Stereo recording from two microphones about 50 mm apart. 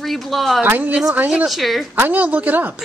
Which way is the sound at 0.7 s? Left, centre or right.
Right.